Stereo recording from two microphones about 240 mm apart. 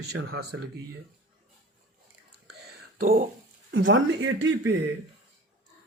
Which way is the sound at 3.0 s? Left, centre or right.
Right.